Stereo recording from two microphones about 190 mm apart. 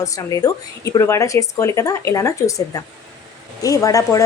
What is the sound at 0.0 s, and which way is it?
A woman's voice, 15° left (ahead or behind).